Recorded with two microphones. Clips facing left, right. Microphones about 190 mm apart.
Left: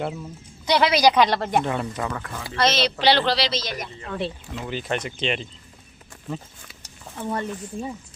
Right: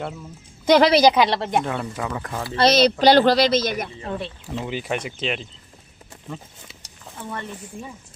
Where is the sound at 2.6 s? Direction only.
40° right (ahead or behind).